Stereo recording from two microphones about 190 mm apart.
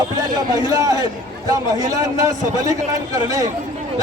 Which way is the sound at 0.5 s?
20° right (ahead or behind).